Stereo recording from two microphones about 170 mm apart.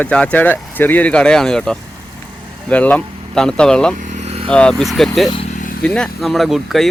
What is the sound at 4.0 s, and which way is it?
Vehicle, 45° right (ahead or behind).